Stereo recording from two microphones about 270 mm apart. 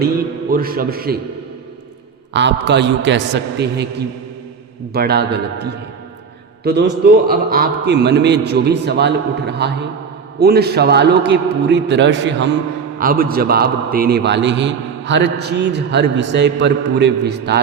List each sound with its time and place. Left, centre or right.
0.5 s a man's voice: right
2.3 s a man's voice: right
6.7 s a man's voice: right